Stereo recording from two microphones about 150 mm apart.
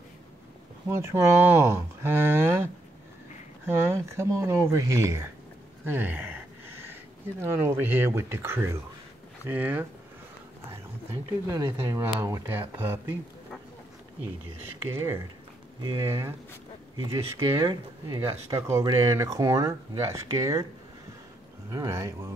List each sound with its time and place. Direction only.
0.8 s speech: 20° right (ahead or behind)
5.9 s a sound: 10° right (ahead or behind)
7.6 s speech: 15° right (ahead or behind)
14.9 s speech: 15° right (ahead or behind)
16.9 s speech: 30° right (ahead or behind)
21.6 s speech: 20° right (ahead or behind)